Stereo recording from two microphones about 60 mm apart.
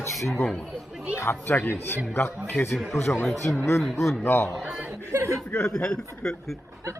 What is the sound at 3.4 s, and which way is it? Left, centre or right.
Speech, left.